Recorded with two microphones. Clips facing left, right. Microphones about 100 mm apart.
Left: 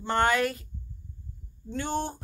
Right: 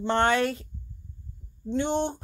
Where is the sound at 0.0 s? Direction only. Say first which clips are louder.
Right 2 dB; 25° right (ahead or behind).